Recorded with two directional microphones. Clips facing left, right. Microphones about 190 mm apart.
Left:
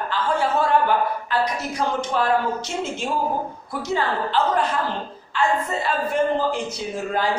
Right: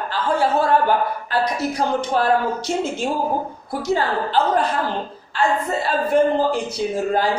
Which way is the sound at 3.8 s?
35° right (ahead or behind).